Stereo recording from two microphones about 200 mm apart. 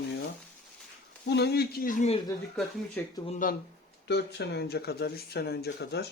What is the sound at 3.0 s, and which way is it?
Speech, 10° left (ahead or behind).